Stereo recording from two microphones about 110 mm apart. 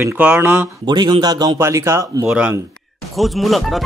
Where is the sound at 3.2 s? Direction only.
Centre (ahead or behind).